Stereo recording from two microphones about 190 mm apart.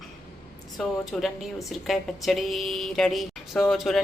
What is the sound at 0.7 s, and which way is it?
A woman's voice, centre (ahead or behind).